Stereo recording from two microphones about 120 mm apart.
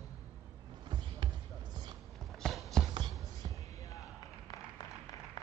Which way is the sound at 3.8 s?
30° left (ahead or behind).